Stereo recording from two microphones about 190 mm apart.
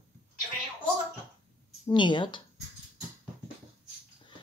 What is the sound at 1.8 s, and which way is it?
Speech, 25° left (ahead or behind).